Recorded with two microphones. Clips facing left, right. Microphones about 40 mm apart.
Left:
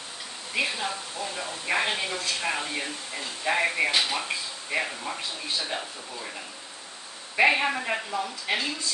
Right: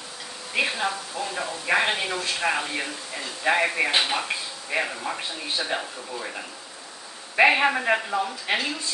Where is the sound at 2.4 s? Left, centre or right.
Right.